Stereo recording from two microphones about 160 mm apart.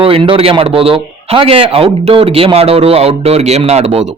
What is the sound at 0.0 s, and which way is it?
A man's voice, 35° right (ahead or behind).